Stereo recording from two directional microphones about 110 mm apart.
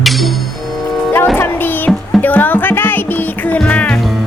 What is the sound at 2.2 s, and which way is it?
Music, 15° left (ahead or behind).